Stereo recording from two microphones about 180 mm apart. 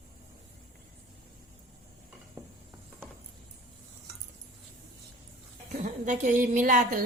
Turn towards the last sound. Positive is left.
turn(degrees=-45)  # may be behind; listen again after turning